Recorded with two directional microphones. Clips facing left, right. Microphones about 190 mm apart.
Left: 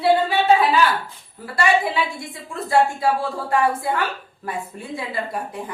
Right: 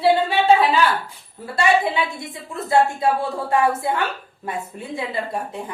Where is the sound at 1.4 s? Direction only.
25° right (ahead or behind).